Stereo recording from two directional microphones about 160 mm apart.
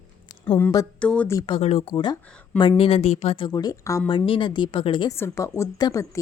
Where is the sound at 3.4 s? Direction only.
25° left (ahead or behind).